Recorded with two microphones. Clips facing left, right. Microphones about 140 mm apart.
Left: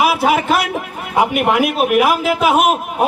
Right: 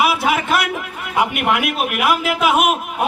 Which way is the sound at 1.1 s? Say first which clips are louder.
Left 4 dB; 40° left (ahead or behind).